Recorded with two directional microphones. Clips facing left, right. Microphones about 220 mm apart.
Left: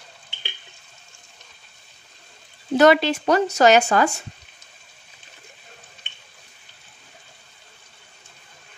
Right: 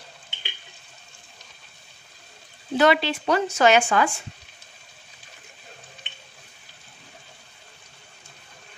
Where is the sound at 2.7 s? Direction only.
45° left (ahead or behind).